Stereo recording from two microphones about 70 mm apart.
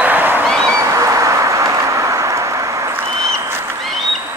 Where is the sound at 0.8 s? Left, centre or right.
Right.